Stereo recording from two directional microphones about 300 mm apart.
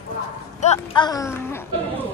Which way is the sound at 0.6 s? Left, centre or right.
Centre.